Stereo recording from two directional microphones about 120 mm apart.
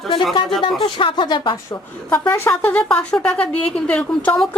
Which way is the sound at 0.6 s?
45° left (ahead or behind).